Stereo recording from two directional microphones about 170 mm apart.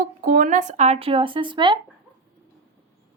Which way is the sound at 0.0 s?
55° right (ahead or behind).